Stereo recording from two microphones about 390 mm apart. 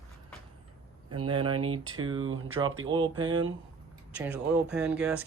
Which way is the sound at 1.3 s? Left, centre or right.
Centre.